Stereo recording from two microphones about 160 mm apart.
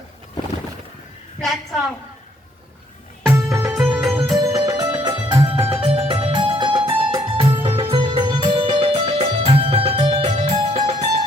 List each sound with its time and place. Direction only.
1.4 s a sound: 5° left (ahead or behind)
3.2 s music: 15° right (ahead or behind)
4.2 s music: 25° right (ahead or behind)